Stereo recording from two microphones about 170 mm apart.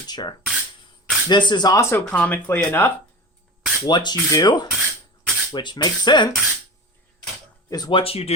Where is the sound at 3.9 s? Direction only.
25° left (ahead or behind).